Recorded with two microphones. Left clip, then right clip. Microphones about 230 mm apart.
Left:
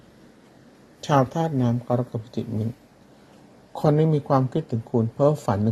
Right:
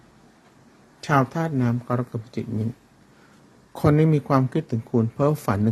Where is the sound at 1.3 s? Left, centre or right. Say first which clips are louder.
Left 1 dB; centre.